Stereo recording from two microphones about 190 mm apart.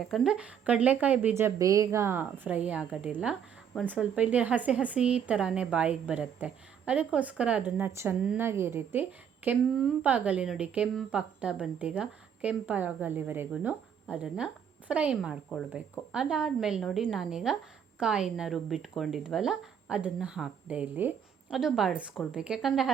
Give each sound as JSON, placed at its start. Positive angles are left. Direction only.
{"t": 0.0, "sound": "speech", "side_deg": 0}